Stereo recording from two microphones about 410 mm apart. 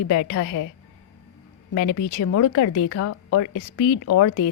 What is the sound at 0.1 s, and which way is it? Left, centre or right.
Speech, left.